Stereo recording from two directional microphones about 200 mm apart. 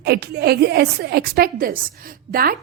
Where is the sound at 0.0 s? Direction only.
55° right (ahead or behind).